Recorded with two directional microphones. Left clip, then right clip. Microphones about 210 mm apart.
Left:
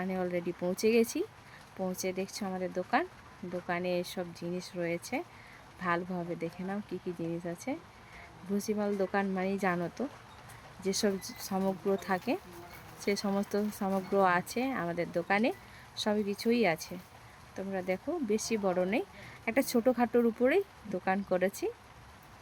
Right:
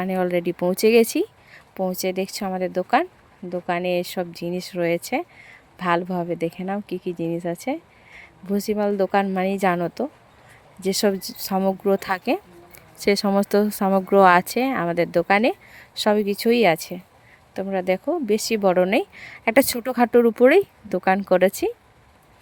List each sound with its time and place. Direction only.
0.0 s speech: 45° right (ahead or behind)